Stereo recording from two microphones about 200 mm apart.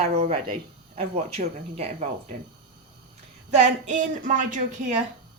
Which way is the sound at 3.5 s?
40° right (ahead or behind).